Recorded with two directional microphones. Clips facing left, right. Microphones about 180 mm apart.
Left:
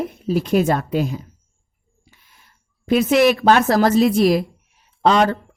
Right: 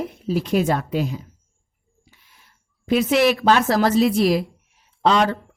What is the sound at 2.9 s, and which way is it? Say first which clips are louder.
Speech: left 3 dB; 50° left (ahead or behind).